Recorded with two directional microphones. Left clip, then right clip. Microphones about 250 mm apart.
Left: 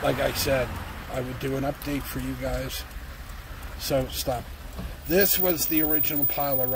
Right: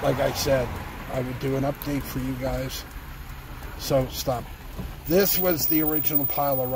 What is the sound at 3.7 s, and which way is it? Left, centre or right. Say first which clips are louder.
Speech: right 2 dB; centre.